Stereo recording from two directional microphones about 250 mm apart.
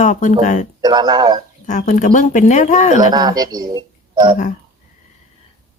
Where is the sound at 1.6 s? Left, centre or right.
Left.